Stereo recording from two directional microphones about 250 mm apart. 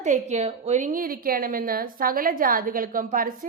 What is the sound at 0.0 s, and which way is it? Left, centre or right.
A woman's voice, right.